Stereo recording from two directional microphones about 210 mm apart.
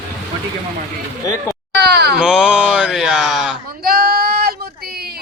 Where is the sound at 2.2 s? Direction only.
5° right (ahead or behind).